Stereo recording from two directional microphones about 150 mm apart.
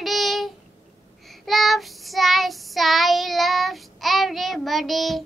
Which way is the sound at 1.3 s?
Centre (ahead or behind).